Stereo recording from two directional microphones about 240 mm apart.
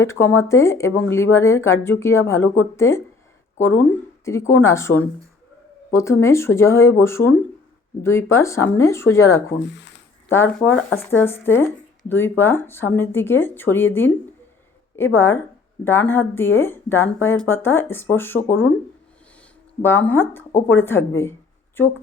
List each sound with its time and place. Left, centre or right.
0.0 s speech: centre
4.3 s speech: centre
9.3 s speech: left
10.2 s speech: centre
19.8 s speech: centre